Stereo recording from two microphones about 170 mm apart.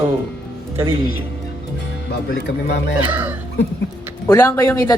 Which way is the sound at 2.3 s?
80° left.